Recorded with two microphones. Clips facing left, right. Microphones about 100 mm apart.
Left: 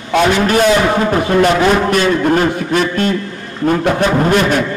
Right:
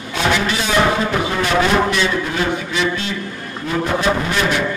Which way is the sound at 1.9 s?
50° left (ahead or behind).